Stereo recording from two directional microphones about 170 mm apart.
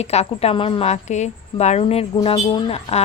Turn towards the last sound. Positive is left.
turn(degrees=35)  # may be behind; listen again after turning